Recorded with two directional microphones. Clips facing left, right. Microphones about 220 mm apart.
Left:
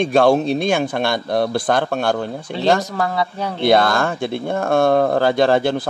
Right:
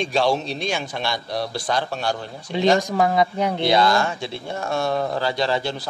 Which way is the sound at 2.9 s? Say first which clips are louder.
Right 2 dB; 20° right (ahead or behind).